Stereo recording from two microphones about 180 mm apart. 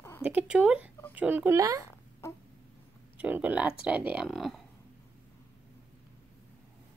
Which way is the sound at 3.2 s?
10° right (ahead or behind).